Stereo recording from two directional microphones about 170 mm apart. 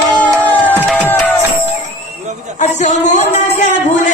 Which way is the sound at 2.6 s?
45° left (ahead or behind).